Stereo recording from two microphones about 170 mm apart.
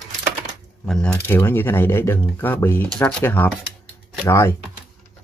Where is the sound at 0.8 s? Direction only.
Centre (ahead or behind).